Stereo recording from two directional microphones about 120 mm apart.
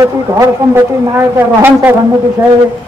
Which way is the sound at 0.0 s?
25° right (ahead or behind).